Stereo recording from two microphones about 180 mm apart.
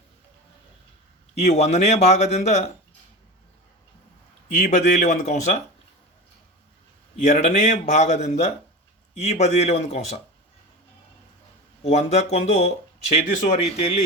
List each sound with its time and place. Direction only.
1.4 s speech: 40° left (ahead or behind)
4.5 s speech: 40° left (ahead or behind)
7.3 s speech: 40° left (ahead or behind)
11.8 s speech: 35° left (ahead or behind)